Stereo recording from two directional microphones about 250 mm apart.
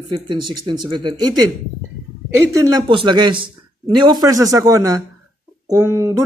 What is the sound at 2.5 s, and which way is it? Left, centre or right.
A man's voice, centre.